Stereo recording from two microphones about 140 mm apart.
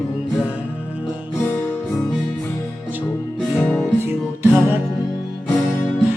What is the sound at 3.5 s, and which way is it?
Music, 10° left (ahead or behind).